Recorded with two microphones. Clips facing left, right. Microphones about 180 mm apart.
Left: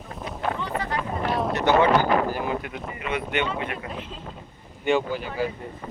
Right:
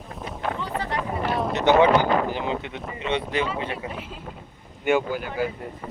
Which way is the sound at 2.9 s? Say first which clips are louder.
Right 3 dB; 30° right (ahead or behind).